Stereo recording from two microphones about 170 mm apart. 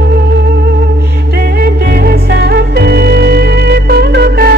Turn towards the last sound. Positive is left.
turn(degrees=-65)  # may be behind; listen again after turning